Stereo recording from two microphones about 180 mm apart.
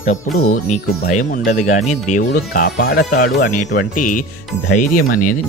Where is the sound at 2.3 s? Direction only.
55° left (ahead or behind).